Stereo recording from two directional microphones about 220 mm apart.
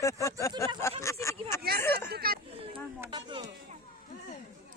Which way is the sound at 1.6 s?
45° right (ahead or behind).